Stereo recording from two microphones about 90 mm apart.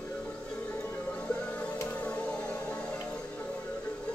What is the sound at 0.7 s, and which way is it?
Music, 15° left (ahead or behind).